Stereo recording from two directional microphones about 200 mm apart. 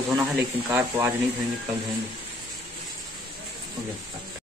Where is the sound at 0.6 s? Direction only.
10° right (ahead or behind).